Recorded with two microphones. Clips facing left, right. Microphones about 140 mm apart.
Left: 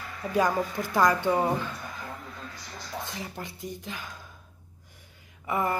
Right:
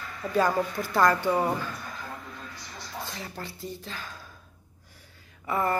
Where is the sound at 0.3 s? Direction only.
15° left (ahead or behind).